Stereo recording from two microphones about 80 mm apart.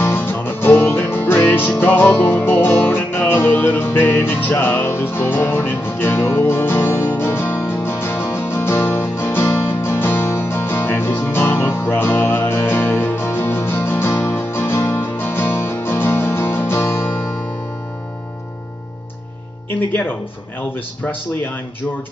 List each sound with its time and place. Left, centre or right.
0.0 s music: left
19.9 s speech: left